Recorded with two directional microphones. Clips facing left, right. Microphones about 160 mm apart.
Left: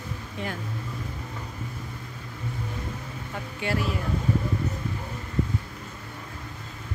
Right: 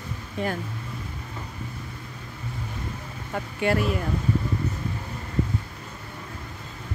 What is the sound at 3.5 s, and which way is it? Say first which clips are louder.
Speech: right 5 dB; 55° right (ahead or behind).